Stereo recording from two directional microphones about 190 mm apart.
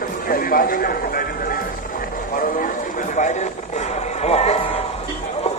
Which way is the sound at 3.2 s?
40° left (ahead or behind).